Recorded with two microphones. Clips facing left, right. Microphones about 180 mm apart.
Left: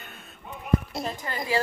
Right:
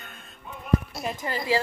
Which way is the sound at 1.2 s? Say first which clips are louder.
Right 4 dB; 20° right (ahead or behind).